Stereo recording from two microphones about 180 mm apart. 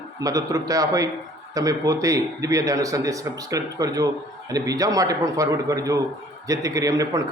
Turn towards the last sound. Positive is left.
turn(degrees=-20)  # may be behind; listen again after turning